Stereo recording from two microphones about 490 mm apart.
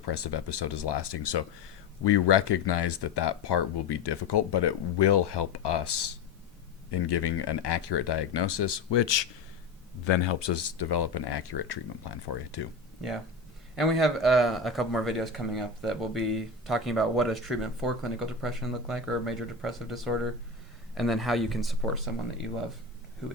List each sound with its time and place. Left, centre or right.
0.0 s speech: left
14.0 s speech: centre